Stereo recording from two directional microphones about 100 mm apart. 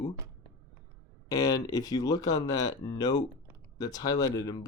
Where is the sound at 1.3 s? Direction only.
40° left (ahead or behind).